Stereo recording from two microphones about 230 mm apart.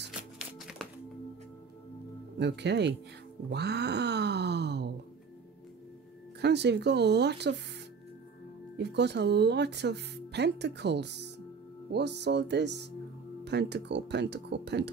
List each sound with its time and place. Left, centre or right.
0.6 s music: centre
2.3 s speech: right
6.4 s speech: right
8.7 s speech: right